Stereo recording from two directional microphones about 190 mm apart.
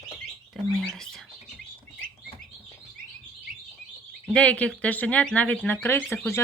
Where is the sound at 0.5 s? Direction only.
Centre (ahead or behind).